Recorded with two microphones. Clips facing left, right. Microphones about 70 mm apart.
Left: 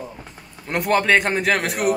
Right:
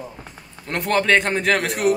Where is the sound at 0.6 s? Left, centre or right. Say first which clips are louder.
Left 1 dB; centre.